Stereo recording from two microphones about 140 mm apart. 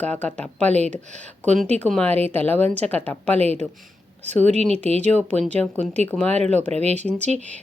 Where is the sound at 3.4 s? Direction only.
50° right (ahead or behind).